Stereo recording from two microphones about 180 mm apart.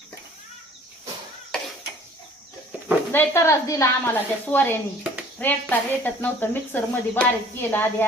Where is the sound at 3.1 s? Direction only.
15° left (ahead or behind).